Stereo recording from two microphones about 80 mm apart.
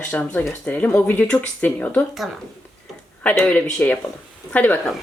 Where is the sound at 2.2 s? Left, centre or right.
Centre.